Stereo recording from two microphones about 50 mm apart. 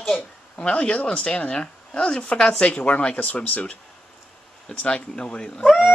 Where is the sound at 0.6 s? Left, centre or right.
Left.